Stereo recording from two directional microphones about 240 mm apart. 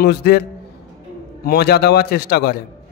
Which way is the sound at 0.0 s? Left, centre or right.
Left.